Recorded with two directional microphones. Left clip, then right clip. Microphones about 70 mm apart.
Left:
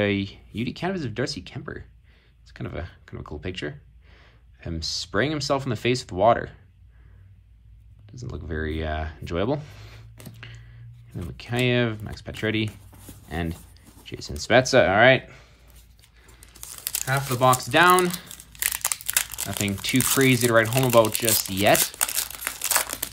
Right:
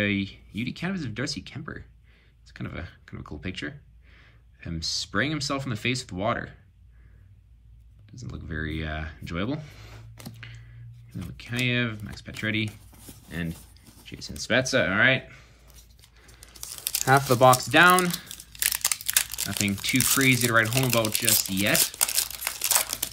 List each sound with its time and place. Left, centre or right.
0.0 s speech: left
8.3 s speech: left
10.3 s a sound: left
11.1 s speech: left
13.3 s speech: left
14.8 s speech: left
17.3 s speech: centre
18.3 s crumpling: left
20.2 s speech: left